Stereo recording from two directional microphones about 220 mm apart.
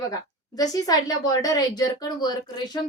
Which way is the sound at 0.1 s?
15° left (ahead or behind).